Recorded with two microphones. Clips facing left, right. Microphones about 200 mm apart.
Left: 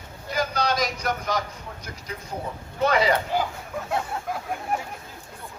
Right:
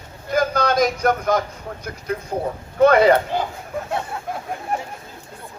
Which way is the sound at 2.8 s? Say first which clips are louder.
Right 8 dB; 55° right (ahead or behind).